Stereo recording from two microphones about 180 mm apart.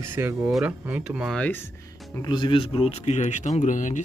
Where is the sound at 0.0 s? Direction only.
15° right (ahead or behind); by 1.7 s 10° left (ahead or behind).